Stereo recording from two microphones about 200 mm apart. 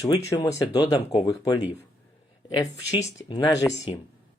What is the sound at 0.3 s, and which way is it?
Speech, 15° left (ahead or behind).